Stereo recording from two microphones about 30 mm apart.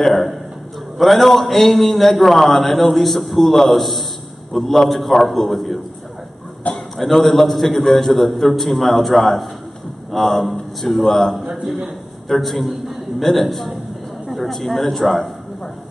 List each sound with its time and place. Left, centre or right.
0.0 s a man's voice: centre
6.7 s a sound: left
7.2 s a man's voice: centre
12.3 s a man's voice: centre